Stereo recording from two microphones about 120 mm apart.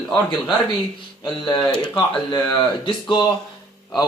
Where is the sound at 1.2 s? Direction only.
40° left (ahead or behind).